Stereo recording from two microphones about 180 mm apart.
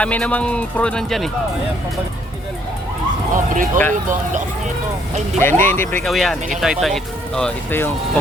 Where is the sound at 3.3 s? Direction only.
50° right (ahead or behind).